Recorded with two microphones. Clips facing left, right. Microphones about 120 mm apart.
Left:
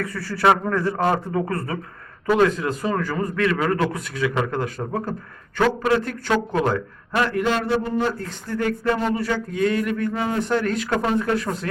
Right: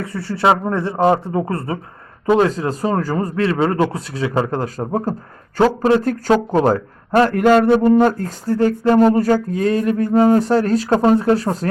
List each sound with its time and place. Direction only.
0.0 s a man's voice: 25° right (ahead or behind); by 8.5 s 45° right (ahead or behind)
8.5 s a man's voice: 30° right (ahead or behind)
9.0 s a man's voice: 40° right (ahead or behind)